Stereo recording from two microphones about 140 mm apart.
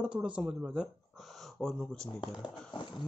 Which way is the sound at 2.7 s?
35° left (ahead or behind).